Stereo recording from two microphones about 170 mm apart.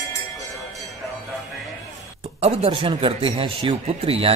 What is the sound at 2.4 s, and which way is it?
Speech, 35° right (ahead or behind).